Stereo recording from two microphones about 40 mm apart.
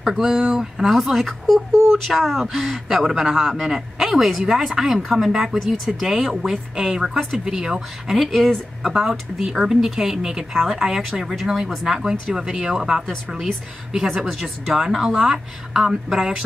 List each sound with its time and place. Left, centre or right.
0.0 s speech: centre
0.8 s speech: centre
12.4 s speech: centre
15.1 s speech: centre